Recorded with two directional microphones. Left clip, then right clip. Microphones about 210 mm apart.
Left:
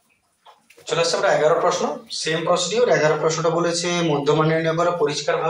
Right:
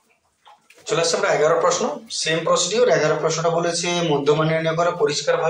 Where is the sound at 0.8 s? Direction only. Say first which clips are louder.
Even; 20° right (ahead or behind).